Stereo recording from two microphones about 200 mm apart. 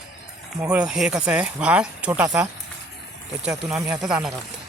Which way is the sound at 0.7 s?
5° right (ahead or behind).